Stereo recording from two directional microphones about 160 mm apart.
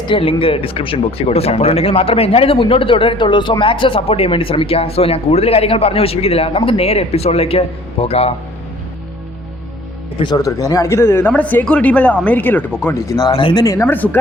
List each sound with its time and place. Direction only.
0.1 s speech: 35° left (ahead or behind)
10.2 s speech: 25° left (ahead or behind)